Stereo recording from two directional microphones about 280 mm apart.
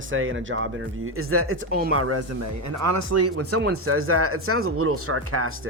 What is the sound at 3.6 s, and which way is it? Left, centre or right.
Speech, right.